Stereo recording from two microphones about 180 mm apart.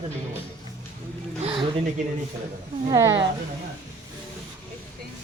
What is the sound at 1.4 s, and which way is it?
Speech, 30° right (ahead or behind).